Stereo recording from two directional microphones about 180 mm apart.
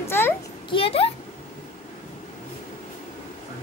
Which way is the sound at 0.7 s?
30° left (ahead or behind).